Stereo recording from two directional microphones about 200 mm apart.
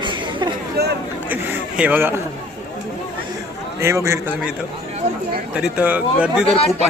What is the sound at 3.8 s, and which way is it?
Speech, 15° right (ahead or behind).